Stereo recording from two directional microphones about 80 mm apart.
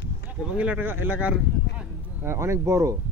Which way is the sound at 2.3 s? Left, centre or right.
Right.